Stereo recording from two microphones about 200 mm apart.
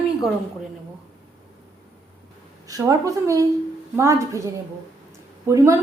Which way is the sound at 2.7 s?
15° right (ahead or behind).